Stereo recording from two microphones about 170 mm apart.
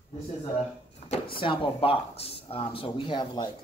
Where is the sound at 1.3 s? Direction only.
30° left (ahead or behind).